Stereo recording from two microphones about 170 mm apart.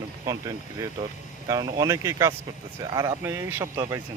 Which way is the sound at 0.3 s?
20° right (ahead or behind).